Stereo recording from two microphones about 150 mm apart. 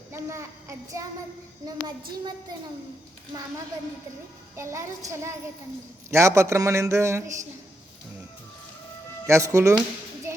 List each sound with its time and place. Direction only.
0.1 s a child's voice: 20° right (ahead or behind)
2.5 s a man's voice: 25° right (ahead or behind)
4.5 s a man's voice: 20° right (ahead or behind)
9.2 s a man's voice: 20° right (ahead or behind)
10.3 s a sound: 20° right (ahead or behind)